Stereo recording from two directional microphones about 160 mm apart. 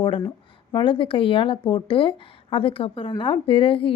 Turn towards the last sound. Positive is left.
turn(degrees=35)  # may be behind; listen again after turning